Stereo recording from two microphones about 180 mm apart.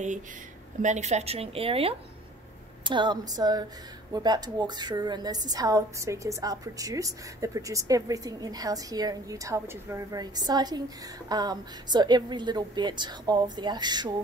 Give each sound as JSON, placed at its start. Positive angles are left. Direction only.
{"t": 0.8, "sound": "a woman's voice", "side_deg": -40}